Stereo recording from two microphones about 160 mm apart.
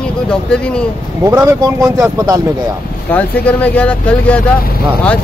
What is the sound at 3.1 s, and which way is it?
Speech, 10° left (ahead or behind).